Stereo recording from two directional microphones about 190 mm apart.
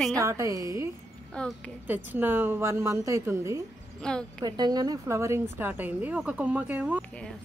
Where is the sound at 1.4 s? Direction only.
5° left (ahead or behind).